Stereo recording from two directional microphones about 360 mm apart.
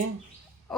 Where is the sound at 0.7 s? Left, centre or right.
Centre.